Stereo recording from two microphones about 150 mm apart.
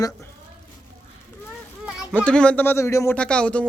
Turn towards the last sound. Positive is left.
turn(degrees=10)  # may be behind; listen again after turning